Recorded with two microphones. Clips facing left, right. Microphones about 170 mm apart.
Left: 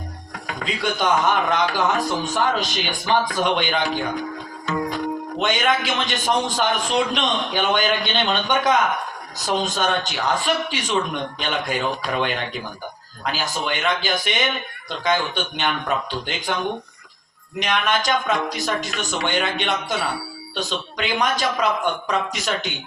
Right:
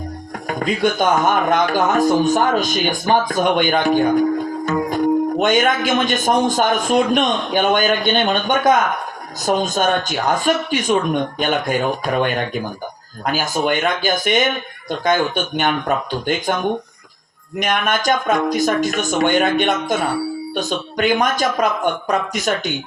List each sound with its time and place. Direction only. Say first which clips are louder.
0.4 s speech: right 7 dB; 50° right (ahead or behind)
17.6 s speech: right 3 dB; 50° right (ahead or behind)